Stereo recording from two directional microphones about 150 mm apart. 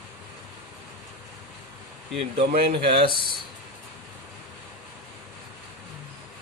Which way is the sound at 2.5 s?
90° right.